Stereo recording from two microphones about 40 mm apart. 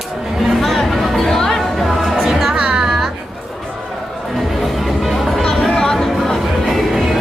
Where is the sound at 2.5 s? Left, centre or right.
Right.